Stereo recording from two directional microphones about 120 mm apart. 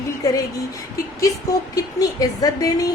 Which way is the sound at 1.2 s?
30° left (ahead or behind).